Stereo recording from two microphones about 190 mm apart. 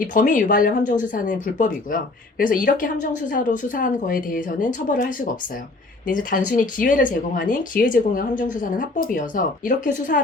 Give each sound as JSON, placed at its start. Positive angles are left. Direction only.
{"t": 0.0, "sound": "speech", "side_deg": 45}